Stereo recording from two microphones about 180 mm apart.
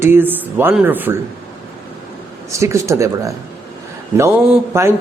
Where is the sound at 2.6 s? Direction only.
15° right (ahead or behind).